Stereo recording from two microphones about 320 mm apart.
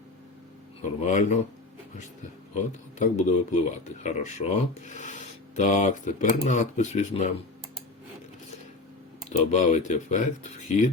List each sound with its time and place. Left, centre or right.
0.8 s speech: left
2.6 s speech: left
9.4 s speech: left